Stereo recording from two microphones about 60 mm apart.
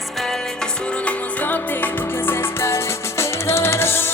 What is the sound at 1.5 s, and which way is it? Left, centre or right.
Music, left.